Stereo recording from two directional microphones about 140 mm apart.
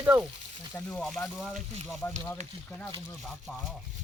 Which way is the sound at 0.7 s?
5° left (ahead or behind).